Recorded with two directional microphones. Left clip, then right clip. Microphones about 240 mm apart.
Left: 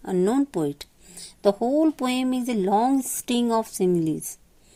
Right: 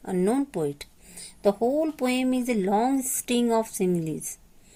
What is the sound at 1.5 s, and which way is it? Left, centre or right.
Speech, left.